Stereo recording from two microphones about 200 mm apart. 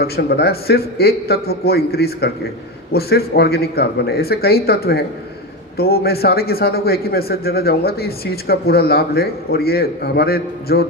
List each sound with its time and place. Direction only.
0.0 s a man's voice: 55° left (ahead or behind)